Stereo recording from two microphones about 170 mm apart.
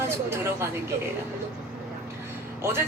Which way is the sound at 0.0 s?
15° right (ahead or behind).